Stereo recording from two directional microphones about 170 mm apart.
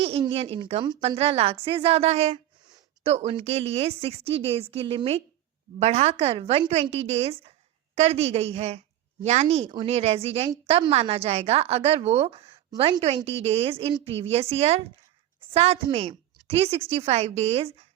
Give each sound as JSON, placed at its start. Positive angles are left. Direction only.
{"t": 0.0, "sound": "a woman's voice", "side_deg": -35}